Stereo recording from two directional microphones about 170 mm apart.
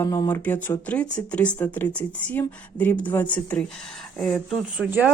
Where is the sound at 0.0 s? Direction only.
20° left (ahead or behind).